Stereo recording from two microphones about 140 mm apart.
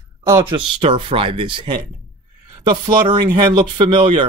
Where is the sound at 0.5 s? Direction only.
35° right (ahead or behind).